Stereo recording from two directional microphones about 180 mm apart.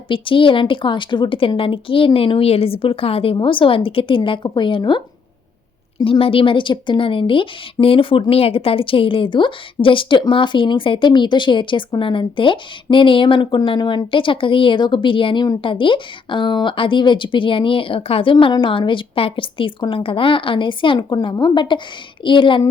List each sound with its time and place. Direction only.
0.1 s a woman's voice: 30° left (ahead or behind)